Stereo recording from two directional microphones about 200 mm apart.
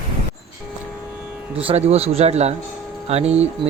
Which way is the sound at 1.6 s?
30° right (ahead or behind).